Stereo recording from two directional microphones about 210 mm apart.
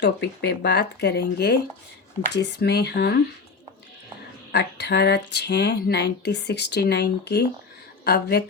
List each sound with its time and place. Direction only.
0.0 s speech: 55° left (ahead or behind)
4.5 s a sound: 55° left (ahead or behind)
5.3 s speech: 55° left (ahead or behind)